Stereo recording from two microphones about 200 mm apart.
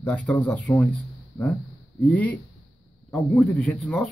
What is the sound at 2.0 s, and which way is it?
Speech, 5° left (ahead or behind).